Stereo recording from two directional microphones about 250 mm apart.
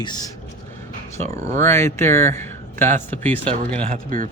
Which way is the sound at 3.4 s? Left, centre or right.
Right.